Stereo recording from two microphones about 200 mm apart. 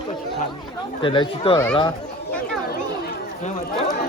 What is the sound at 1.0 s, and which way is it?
Speech, 25° left (ahead or behind).